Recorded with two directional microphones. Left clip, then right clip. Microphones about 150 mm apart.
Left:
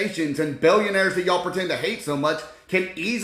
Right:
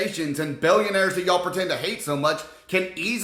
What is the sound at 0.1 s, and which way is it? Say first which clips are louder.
Speech: left 3 dB; 10° right (ahead or behind).